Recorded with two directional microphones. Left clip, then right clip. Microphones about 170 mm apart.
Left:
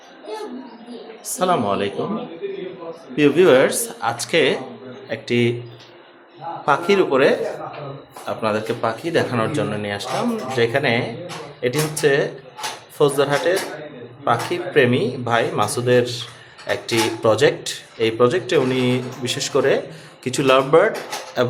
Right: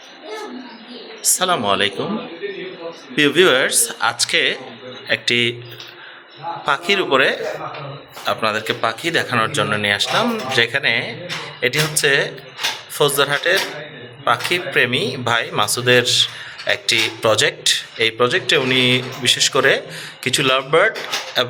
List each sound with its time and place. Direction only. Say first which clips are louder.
1.2 s a man's voice: right 1 dB; 5° left (ahead or behind)
3.2 s speech: even; centre (ahead or behind)
6.7 s speech: even; 10° left (ahead or behind)